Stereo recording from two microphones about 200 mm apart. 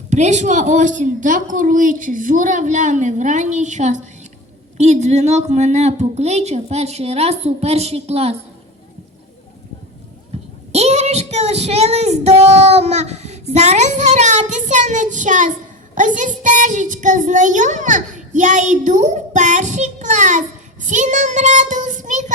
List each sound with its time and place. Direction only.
0.1 s a child's voice: 35° right (ahead or behind)
10.7 s child singing: 30° right (ahead or behind)
16.0 s a child's voice: 40° right (ahead or behind)
20.8 s child singing: 35° right (ahead or behind)